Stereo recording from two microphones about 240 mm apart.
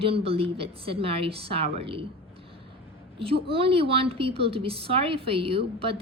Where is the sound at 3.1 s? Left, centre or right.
Right.